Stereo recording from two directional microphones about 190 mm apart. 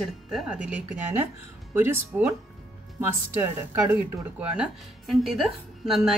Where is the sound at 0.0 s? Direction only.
5° right (ahead or behind).